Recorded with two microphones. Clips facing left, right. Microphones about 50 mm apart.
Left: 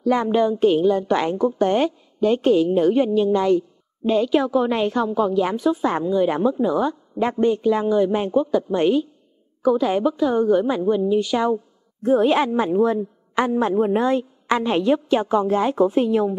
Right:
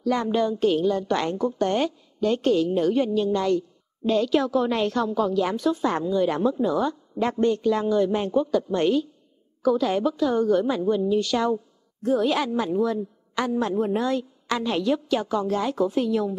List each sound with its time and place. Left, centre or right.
0.0 s a woman's voice: centre
12.0 s a woman's voice: left